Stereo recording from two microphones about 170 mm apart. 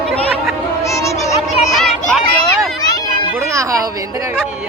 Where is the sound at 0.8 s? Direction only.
20° left (ahead or behind).